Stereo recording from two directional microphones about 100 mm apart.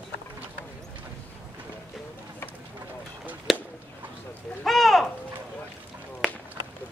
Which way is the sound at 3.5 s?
Centre (ahead or behind).